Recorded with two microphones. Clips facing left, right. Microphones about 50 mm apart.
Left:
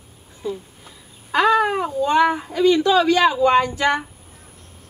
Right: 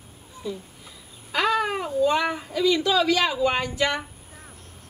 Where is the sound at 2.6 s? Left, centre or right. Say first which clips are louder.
Left 6 dB; left.